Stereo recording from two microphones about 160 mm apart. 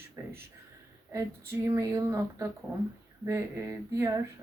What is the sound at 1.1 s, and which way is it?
A woman's voice, 15° right (ahead or behind).